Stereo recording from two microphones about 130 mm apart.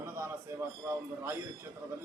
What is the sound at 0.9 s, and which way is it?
Speech, 20° right (ahead or behind).